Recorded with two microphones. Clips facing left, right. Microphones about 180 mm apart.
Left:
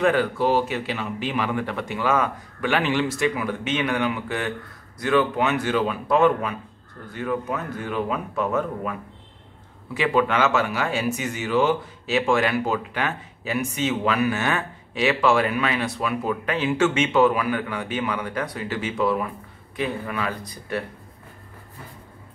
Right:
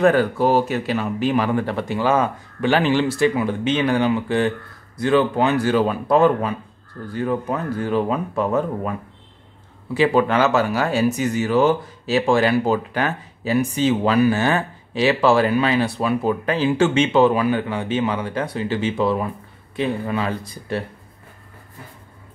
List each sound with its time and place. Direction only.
0.0 s speech: 40° right (ahead or behind)
9.9 s speech: 35° right (ahead or behind)